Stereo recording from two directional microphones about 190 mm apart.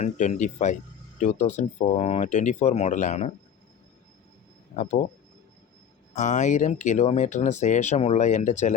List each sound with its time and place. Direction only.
0.0 s speech: 40° left (ahead or behind)
4.8 s speech: 40° left (ahead or behind)
6.1 s speech: 40° left (ahead or behind)